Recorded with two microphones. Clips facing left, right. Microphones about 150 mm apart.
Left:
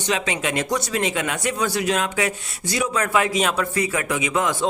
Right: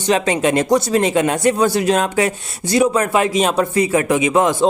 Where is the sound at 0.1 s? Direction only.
40° right (ahead or behind).